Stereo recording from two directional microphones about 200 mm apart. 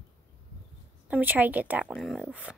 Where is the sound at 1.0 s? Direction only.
10° right (ahead or behind).